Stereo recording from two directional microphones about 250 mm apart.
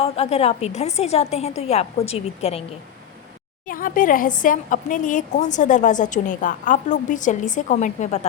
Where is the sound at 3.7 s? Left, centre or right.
Left.